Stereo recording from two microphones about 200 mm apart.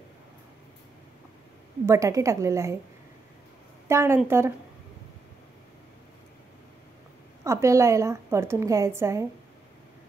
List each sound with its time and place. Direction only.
1.9 s a woman's voice: 15° right (ahead or behind)
3.8 s a woman's voice: 10° right (ahead or behind)
7.4 s a woman's voice: 15° right (ahead or behind)